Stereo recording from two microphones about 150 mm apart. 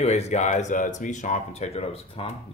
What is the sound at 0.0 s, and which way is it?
Speech, 45° left (ahead or behind).